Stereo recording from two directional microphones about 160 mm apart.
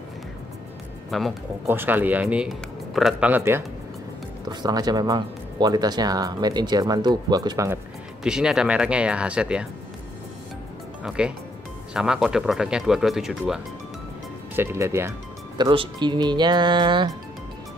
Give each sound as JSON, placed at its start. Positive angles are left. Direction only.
{"t": 1.1, "sound": "speech", "side_deg": 0}
{"t": 1.7, "sound": "speech", "side_deg": -10}
{"t": 4.5, "sound": "speech", "side_deg": -25}
{"t": 8.2, "sound": "speech", "side_deg": -5}
{"t": 11.1, "sound": "speech", "side_deg": -5}
{"t": 14.5, "sound": "speech", "side_deg": -15}
{"t": 15.5, "sound": "speech", "side_deg": -30}